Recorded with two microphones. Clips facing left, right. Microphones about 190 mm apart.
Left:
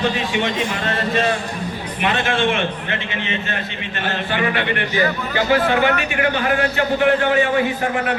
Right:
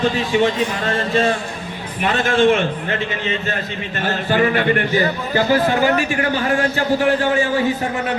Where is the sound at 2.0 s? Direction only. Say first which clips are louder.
Right 4 dB; 40° right (ahead or behind).